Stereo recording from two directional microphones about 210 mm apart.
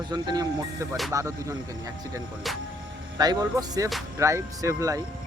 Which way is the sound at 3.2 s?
20° right (ahead or behind).